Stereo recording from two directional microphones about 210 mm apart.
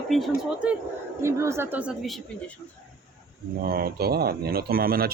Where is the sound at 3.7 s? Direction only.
45° right (ahead or behind).